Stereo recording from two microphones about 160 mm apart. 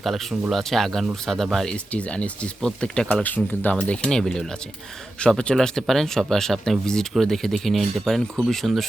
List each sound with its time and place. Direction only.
0.0 s speech: centre (ahead or behind)